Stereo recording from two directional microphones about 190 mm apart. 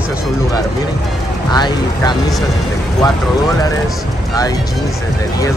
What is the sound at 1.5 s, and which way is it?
Speech, 20° left (ahead or behind).